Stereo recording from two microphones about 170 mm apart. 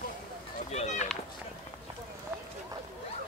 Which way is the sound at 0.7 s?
40° left (ahead or behind).